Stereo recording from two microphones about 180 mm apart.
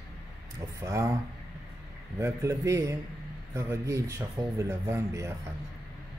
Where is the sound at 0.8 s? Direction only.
15° right (ahead or behind).